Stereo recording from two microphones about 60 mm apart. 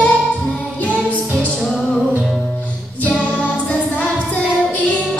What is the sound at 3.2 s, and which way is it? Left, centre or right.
Music, left.